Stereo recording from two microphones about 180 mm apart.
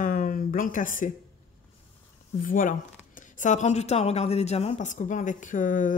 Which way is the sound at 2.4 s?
50° left (ahead or behind).